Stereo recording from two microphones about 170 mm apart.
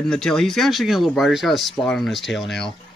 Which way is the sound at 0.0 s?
5° left (ahead or behind).